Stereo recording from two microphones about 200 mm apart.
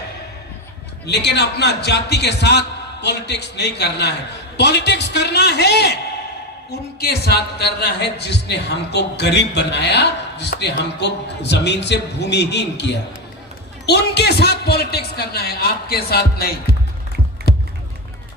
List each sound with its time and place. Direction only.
1.0 s a man's voice: 60° left (ahead or behind)
7.0 s a man's voice: 55° left (ahead or behind)
13.8 s a man's voice: 55° left (ahead or behind)